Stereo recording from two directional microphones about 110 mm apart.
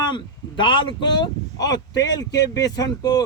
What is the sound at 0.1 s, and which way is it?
A man's voice, 45° left (ahead or behind).